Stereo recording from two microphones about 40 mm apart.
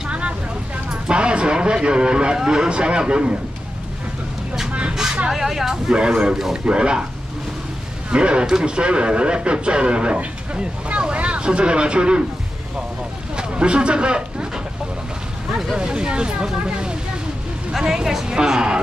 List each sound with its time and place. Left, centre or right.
1.0 s speech: right
5.3 s speech: centre
5.9 s speech: right
8.1 s speech: right
13.4 s a sound: right
15.5 s speech: centre
15.8 s speech: right
17.7 s speech: centre